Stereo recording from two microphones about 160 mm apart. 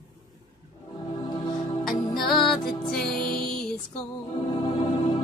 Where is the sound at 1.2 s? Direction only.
25° left (ahead or behind).